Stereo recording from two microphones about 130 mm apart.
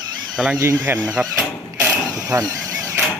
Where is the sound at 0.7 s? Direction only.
10° right (ahead or behind).